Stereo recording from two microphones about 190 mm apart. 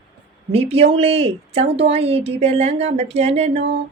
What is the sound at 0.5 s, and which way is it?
A woman's voice, 30° right (ahead or behind).